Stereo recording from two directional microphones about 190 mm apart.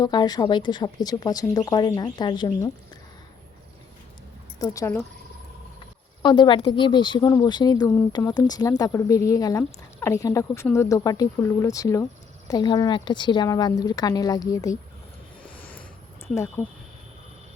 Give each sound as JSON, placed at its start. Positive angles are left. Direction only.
{"t": 0.0, "sound": "speech", "side_deg": 20}
{"t": 4.6, "sound": "speech", "side_deg": 15}
{"t": 6.2, "sound": "speech", "side_deg": 25}
{"t": 15.4, "sound": "a sound", "side_deg": 10}
{"t": 16.3, "sound": "speech", "side_deg": 15}